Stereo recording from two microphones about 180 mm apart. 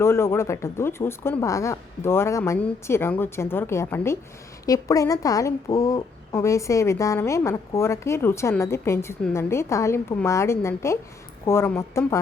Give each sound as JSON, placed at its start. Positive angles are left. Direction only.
{"t": 0.0, "sound": "a woman's voice", "side_deg": 15}